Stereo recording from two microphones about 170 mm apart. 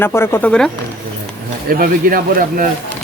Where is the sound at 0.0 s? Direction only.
15° left (ahead or behind).